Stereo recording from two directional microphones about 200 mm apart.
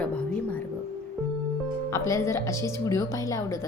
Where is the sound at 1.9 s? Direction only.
15° left (ahead or behind).